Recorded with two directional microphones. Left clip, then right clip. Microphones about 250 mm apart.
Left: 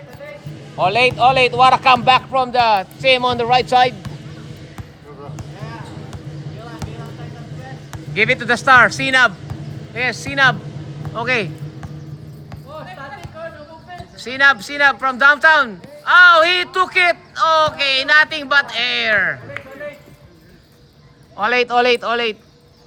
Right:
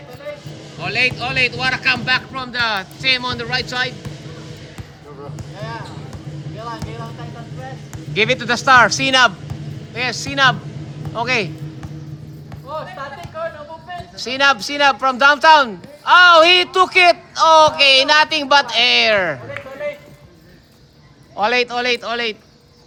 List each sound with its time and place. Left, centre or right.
0.9 s speech: centre
8.1 s speech: centre
12.7 s music: right
14.2 s speech: centre
21.3 s speech: centre